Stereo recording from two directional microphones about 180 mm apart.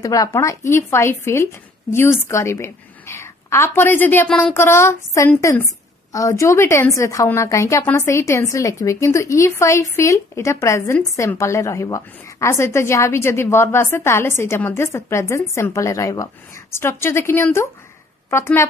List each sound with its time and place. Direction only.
0.0 s a woman's voice: 20° left (ahead or behind)